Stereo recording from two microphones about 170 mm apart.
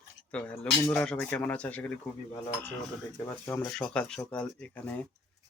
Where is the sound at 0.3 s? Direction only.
5° left (ahead or behind).